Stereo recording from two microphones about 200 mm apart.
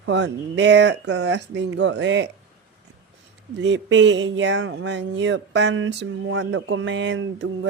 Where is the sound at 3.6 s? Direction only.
65° right (ahead or behind).